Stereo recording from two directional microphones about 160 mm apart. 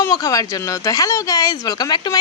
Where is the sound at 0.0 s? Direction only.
20° left (ahead or behind).